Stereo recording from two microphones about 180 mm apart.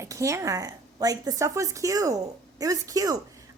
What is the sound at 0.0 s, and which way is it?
A woman's voice, 15° right (ahead or behind).